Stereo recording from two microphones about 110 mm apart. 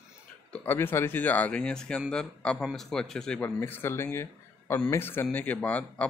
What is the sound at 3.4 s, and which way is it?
A man's voice, 20° left (ahead or behind).